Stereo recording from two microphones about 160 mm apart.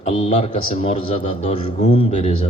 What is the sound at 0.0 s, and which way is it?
A man's voice, 40° left (ahead or behind).